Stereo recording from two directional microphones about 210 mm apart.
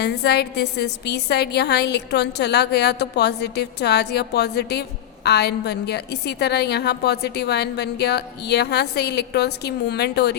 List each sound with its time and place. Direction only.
0.0 s a woman's voice: 50° left (ahead or behind)